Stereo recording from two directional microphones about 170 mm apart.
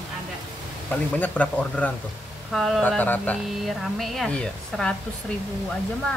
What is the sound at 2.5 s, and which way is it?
Speech, 5° right (ahead or behind).